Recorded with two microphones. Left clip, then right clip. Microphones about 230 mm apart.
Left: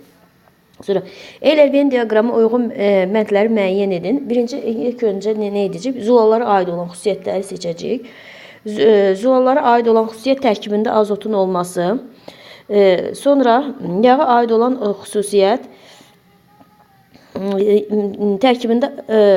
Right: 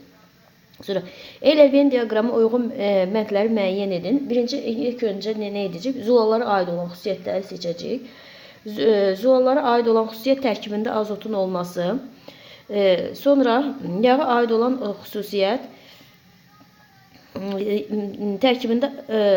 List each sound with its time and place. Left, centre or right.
0.8 s a woman's voice: centre
17.3 s a woman's voice: left